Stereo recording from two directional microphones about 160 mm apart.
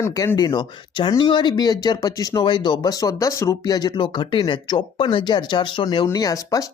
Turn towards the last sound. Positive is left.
turn(degrees=20)  # may be behind; listen again after turning